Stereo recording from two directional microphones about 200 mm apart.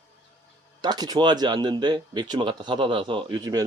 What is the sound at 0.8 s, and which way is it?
Speech, 20° right (ahead or behind).